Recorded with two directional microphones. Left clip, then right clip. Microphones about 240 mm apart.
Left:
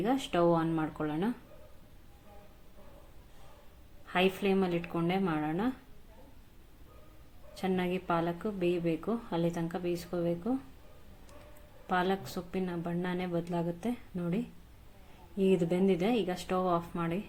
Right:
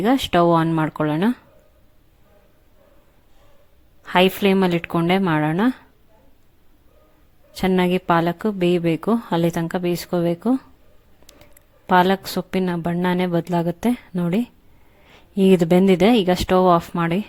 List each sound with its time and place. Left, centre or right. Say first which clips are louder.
0.0 s speech: right 12 dB; right
4.0 s speech: right 13 dB; right
7.5 s speech: right 13 dB; right
11.9 s speech: right 15 dB; right